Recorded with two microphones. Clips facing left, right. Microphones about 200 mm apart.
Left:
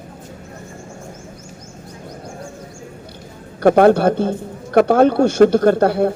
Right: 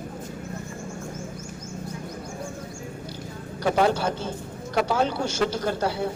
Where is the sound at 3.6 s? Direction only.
55° left (ahead or behind).